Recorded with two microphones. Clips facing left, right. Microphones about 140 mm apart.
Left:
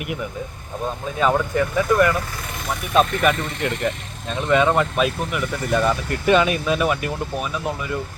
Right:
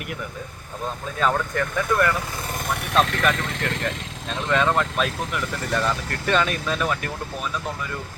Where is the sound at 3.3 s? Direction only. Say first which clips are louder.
Left 2 dB; 90° right.